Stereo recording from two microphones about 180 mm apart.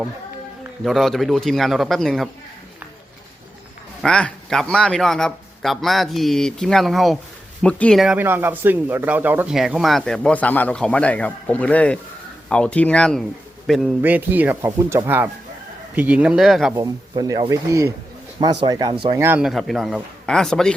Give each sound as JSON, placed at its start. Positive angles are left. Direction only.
{"t": 0.9, "sound": "speech", "side_deg": 0}
{"t": 4.0, "sound": "speech", "side_deg": 5}
{"t": 16.7, "sound": "speech", "side_deg": -20}
{"t": 19.2, "sound": "speech", "side_deg": -5}